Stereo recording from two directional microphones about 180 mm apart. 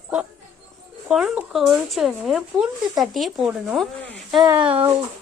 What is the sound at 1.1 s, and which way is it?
Speech, centre (ahead or behind).